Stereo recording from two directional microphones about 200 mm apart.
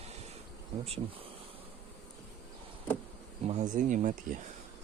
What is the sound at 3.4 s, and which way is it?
Speech, 35° right (ahead or behind).